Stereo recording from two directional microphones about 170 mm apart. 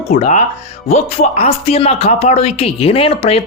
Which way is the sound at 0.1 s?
45° left (ahead or behind).